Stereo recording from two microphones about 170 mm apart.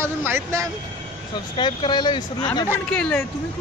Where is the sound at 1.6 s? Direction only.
25° left (ahead or behind).